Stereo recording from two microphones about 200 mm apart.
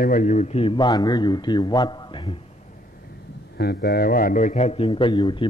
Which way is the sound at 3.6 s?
50° left (ahead or behind).